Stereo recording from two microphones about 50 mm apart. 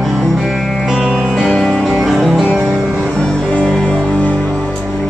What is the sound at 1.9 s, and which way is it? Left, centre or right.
Music, centre.